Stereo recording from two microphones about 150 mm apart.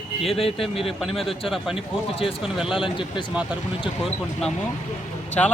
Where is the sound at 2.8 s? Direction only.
30° left (ahead or behind).